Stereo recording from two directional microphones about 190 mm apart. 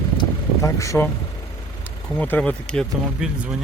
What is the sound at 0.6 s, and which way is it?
Speech, 15° left (ahead or behind).